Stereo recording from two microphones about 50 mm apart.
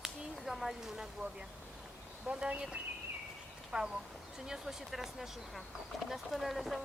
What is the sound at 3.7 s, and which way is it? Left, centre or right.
Speech, centre.